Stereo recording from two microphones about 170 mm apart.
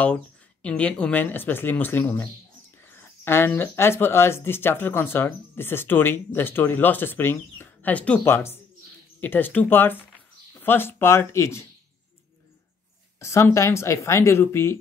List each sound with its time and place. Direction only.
0.0 s speech: 5° left (ahead or behind)
13.2 s speech: 15° left (ahead or behind)